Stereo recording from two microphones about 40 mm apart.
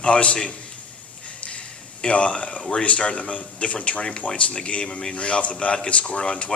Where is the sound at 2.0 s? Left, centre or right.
Left.